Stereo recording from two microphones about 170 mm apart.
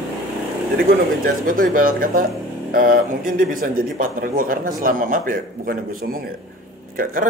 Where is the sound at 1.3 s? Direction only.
55° right (ahead or behind).